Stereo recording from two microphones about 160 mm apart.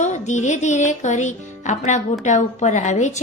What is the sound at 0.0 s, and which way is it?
A woman's voice, 50° left (ahead or behind).